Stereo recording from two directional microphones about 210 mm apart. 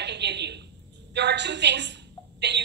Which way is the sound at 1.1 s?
55° right (ahead or behind).